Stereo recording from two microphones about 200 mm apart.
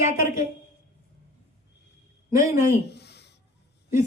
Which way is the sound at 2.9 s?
55° left (ahead or behind).